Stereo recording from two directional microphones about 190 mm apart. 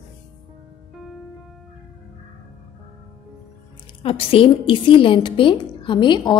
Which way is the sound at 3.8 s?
30° left (ahead or behind).